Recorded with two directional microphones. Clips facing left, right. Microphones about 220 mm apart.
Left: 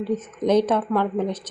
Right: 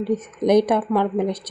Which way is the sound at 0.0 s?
15° right (ahead or behind).